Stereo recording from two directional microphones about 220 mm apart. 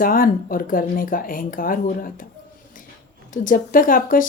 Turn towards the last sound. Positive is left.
turn(degrees=40)  # may be behind; listen again after turning